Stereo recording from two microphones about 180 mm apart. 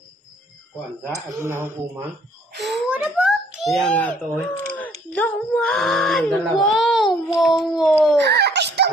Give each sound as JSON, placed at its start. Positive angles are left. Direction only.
{"t": 1.1, "sound": "a child's voice", "side_deg": -15}
{"t": 8.2, "sound": "giggle", "side_deg": -70}